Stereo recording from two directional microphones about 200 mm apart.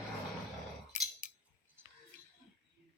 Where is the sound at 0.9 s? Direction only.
40° left (ahead or behind).